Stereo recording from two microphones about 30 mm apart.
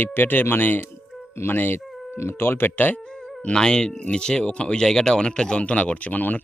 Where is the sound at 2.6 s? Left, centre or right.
Left.